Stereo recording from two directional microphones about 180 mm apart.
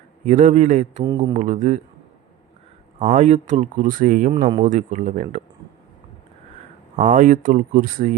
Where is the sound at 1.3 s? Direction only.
40° right (ahead or behind).